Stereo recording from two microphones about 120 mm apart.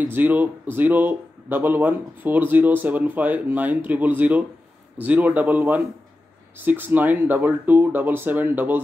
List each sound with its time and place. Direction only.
0.0 s speech: 15° right (ahead or behind)